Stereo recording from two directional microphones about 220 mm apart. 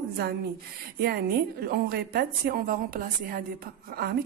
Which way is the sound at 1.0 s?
45° right (ahead or behind).